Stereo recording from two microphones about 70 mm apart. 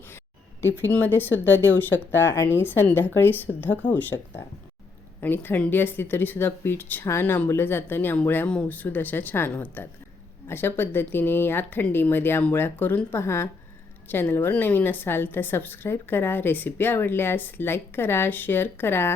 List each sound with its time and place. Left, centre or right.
0.9 s a woman's voice: left
5.2 s a woman's voice: left
8.4 s speech: centre
8.9 s a woman's voice: left